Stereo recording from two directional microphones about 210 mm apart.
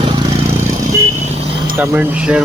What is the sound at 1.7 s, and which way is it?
Speech, 10° right (ahead or behind).